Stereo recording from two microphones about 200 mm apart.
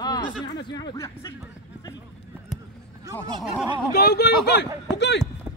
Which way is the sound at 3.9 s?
55° left (ahead or behind).